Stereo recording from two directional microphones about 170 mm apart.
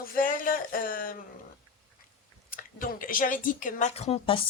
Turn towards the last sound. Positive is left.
turn(degrees=35)  # may be behind; listen again after turning